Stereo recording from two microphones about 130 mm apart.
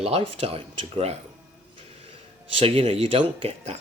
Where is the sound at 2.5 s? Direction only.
50° right (ahead or behind).